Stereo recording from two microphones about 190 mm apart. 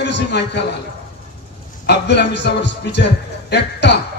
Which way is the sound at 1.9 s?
65° left (ahead or behind).